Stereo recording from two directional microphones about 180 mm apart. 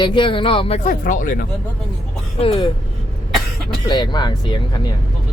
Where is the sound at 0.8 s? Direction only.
45° left (ahead or behind).